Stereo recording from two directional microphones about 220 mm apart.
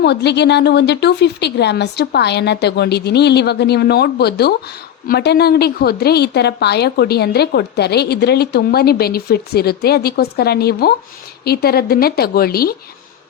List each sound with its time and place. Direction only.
0.0 s a woman's voice: 50° left (ahead or behind)